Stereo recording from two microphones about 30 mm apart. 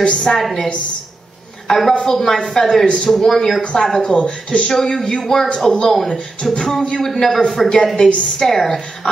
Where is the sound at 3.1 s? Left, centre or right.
Centre.